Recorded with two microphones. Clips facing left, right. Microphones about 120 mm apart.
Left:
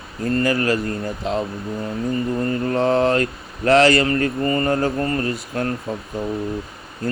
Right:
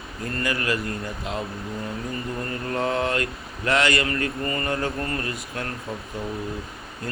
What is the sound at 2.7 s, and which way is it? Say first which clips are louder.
Speech: left 6 dB; 30° left (ahead or behind).